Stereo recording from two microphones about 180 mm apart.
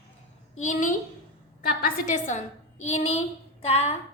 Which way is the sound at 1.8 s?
45° left (ahead or behind).